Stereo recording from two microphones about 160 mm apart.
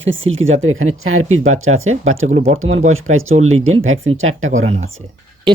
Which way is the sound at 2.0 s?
50° right (ahead or behind).